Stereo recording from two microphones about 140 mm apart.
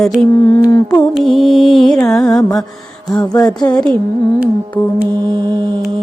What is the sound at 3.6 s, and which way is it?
Speech, 30° left (ahead or behind).